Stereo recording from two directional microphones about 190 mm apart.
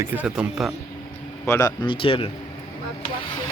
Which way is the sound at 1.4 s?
15° left (ahead or behind).